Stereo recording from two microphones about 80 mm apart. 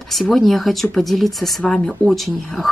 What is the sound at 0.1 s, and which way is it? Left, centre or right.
Speech, centre.